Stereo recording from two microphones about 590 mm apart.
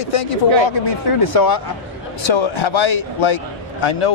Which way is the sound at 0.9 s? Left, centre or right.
Left.